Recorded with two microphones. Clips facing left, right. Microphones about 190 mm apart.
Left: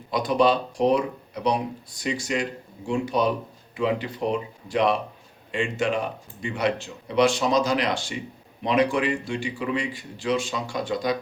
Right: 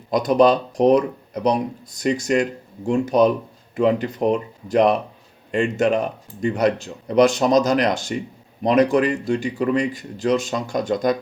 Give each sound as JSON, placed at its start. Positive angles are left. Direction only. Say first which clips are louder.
{"t": 0.1, "sound": "speech", "louder": "right 5 dB", "side_deg": -45}